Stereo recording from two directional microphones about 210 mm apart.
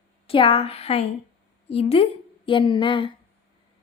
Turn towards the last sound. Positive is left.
turn(degrees=25)  # may be behind; listen again after turning